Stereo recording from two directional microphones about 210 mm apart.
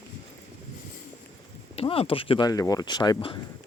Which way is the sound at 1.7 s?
25° left (ahead or behind).